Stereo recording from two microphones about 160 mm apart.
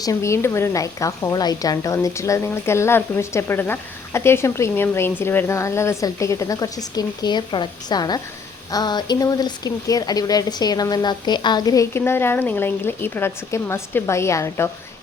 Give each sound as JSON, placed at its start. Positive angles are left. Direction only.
{"t": 0.0, "sound": "a woman's voice", "side_deg": 20}